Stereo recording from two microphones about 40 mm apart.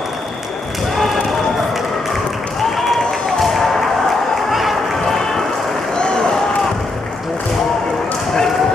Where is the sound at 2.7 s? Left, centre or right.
Centre.